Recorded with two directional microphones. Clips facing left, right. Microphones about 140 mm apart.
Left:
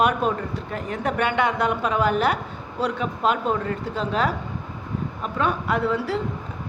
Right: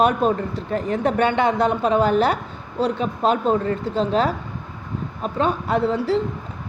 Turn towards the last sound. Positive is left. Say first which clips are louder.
# right 4 dB
turn(degrees=-30)  # may be behind; listen again after turning